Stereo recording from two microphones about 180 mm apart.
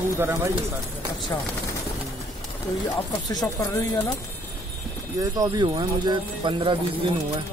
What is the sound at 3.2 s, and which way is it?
Speech, 20° left (ahead or behind).